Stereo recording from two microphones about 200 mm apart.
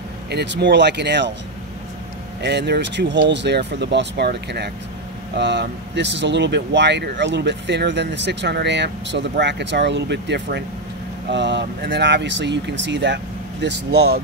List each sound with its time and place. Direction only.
0.3 s speech: 55° right (ahead or behind)
2.4 s speech: 55° right (ahead or behind)